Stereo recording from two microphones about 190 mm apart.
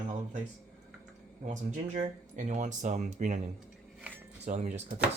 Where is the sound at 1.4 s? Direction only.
40° right (ahead or behind).